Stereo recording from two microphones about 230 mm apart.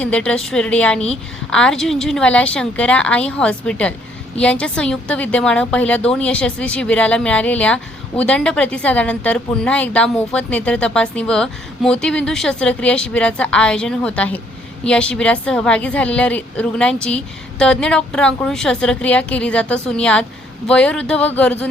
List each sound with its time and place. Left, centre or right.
0.0 s a woman's voice: centre